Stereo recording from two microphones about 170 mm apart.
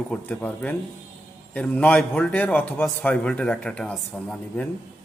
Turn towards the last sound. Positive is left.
turn(degrees=5)  # may be behind; listen again after turning